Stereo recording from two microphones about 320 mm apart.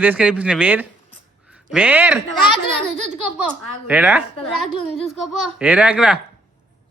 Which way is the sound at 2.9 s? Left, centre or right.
Right.